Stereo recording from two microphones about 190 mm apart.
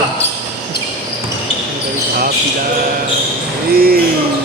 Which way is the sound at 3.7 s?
50° right (ahead or behind).